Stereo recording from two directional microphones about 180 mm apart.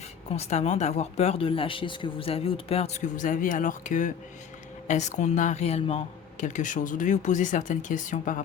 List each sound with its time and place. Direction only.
0.3 s speech: 35° left (ahead or behind)